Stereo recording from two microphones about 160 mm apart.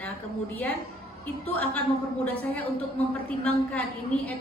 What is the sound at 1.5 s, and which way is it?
Music, 10° left (ahead or behind).